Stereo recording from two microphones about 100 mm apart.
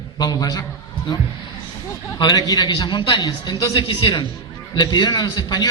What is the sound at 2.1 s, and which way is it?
A man's voice, 40° left (ahead or behind).